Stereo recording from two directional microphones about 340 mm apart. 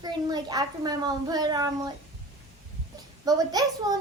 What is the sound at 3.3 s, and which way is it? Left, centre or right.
Speech, centre.